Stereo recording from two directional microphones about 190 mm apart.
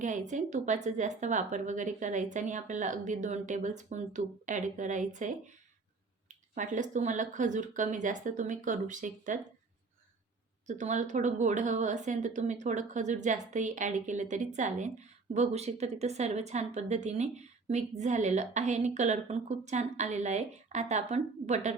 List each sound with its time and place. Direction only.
0.0 s a woman's voice: 40° right (ahead or behind)
6.5 s a woman's voice: 40° right (ahead or behind)
10.7 s a woman's voice: 40° right (ahead or behind)